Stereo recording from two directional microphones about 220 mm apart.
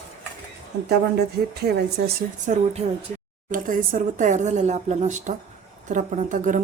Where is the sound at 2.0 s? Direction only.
45° right (ahead or behind).